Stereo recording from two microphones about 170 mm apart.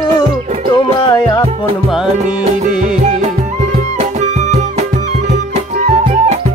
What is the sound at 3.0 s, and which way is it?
Music, 45° right (ahead or behind).